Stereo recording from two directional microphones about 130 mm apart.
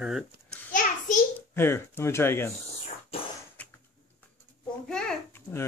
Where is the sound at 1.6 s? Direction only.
20° left (ahead or behind).